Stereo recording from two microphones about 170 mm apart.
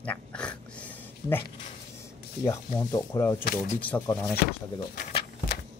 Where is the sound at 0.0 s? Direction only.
5° left (ahead or behind).